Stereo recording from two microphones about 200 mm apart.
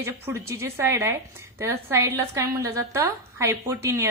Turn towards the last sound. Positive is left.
turn(degrees=-15)  # may be behind; listen again after turning